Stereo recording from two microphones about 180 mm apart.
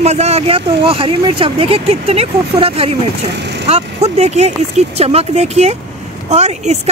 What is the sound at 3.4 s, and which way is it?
Vehicle, 75° right (ahead or behind).